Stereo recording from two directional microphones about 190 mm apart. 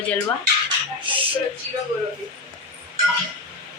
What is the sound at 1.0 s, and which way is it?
Speech, 25° right (ahead or behind).